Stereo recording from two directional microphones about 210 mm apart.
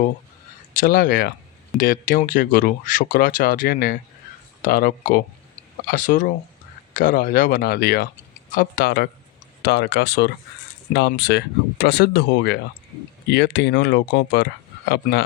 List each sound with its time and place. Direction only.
0.8 s speech: 45° left (ahead or behind)